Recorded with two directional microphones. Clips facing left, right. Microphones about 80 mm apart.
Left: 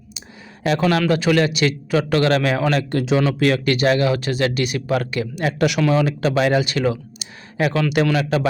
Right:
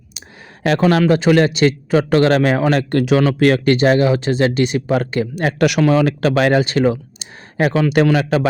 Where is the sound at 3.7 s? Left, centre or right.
Right.